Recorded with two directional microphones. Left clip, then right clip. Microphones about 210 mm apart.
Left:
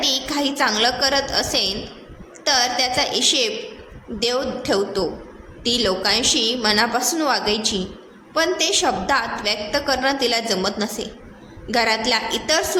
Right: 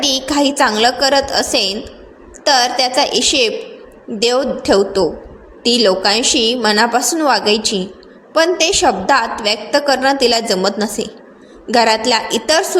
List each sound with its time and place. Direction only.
0.0 s a woman's voice: 30° right (ahead or behind)